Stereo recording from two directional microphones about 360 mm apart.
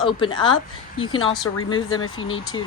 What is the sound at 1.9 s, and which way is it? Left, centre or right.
Speech, left.